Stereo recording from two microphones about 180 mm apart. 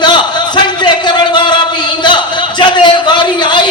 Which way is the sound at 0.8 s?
25° left (ahead or behind).